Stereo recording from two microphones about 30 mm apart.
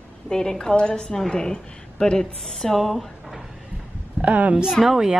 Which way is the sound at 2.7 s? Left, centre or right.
Centre.